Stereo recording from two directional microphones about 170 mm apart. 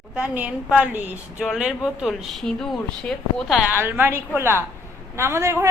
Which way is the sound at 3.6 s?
10° right (ahead or behind).